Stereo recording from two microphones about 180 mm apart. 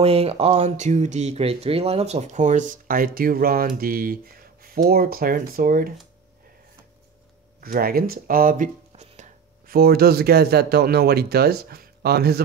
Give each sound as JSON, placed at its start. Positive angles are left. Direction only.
{"t": 0.0, "sound": "speech", "side_deg": -35}
{"t": 7.6, "sound": "speech", "side_deg": -55}
{"t": 9.7, "sound": "speech", "side_deg": -60}